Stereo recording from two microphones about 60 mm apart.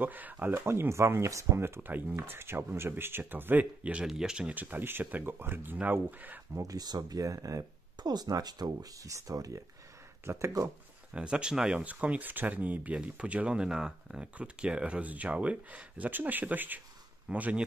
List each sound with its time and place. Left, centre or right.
0.0 s speech: right
0.5 s speech: right
1.8 s speech: right
3.8 s speech: centre
4.6 s speech: right
6.6 s speech: right
8.2 s speech: right
10.3 s speech: right
11.1 s speech: centre
11.8 s speech: right